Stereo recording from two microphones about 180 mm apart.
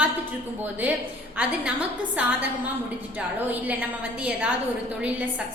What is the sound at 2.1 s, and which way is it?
A woman's voice, 10° right (ahead or behind).